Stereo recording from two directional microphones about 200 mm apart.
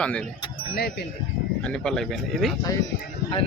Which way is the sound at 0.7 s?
50° left (ahead or behind).